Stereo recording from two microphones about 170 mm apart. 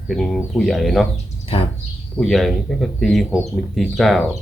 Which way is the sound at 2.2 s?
Centre (ahead or behind).